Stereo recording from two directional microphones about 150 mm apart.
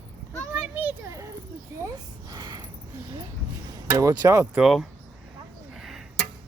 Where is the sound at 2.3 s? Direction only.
25° right (ahead or behind).